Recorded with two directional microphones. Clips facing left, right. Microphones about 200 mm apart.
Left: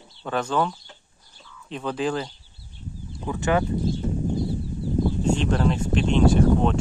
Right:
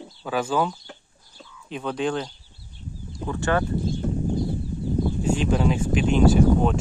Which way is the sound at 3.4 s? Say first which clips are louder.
Left 1 dB; 20° left (ahead or behind).